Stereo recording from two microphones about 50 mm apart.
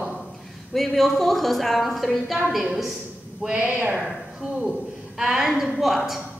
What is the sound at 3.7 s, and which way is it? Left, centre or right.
Speech, right.